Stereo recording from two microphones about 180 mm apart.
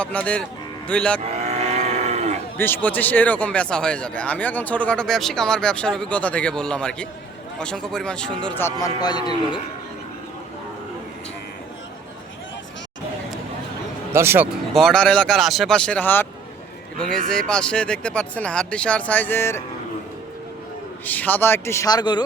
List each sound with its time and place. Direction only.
0.0 s speech: 5° left (ahead or behind)
1.2 s livestock: 35° right (ahead or behind)
2.6 s speech: 10° left (ahead or behind)
14.1 s a man's voice: 15° right (ahead or behind)
14.5 s speech: centre (ahead or behind)
21.0 s speech: 10° left (ahead or behind)